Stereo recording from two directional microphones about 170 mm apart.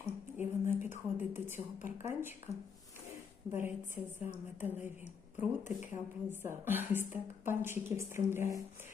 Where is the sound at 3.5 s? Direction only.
15° right (ahead or behind).